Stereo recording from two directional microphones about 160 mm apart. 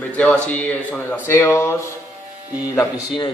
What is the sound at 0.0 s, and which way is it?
Speech, 10° left (ahead or behind).